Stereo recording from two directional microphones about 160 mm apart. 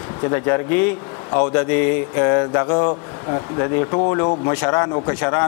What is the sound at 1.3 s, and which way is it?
Mantra, 15° left (ahead or behind).